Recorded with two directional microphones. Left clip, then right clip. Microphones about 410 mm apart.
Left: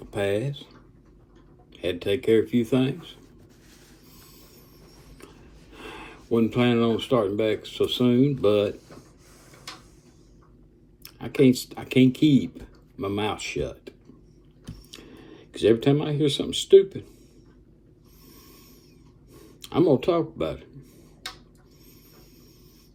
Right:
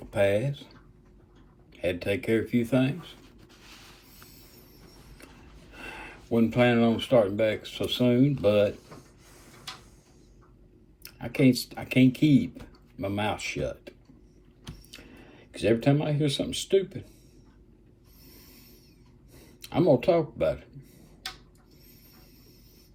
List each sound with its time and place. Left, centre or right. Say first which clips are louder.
0.1 s speech: right 2 dB; centre
1.7 s speech: left 2 dB; centre
5.7 s a sound: left 1 dB; centre
6.5 s speech: right 3 dB; centre
11.0 s speech: left 4 dB; centre
15.2 s speech: left 6 dB; centre
18.3 s a sound: left 3 dB; centre
19.3 s speech: left 3 dB; centre